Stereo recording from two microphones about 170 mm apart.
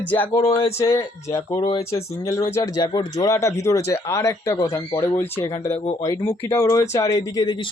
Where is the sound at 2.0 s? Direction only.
15° left (ahead or behind).